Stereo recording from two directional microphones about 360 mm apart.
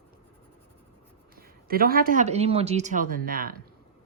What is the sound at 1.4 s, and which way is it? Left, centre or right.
Speech, right.